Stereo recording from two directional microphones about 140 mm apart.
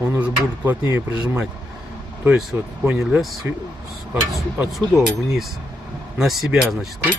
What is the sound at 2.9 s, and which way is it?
Speech, 5° right (ahead or behind).